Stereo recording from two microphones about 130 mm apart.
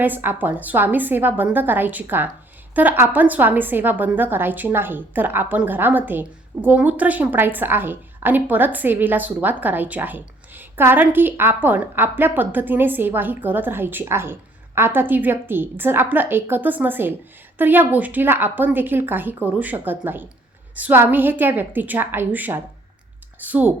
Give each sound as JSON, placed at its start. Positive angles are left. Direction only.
{"t": 0.0, "sound": "a woman's voice", "side_deg": -15}